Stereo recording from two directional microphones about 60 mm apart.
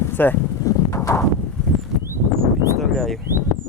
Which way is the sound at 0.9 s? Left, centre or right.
Left.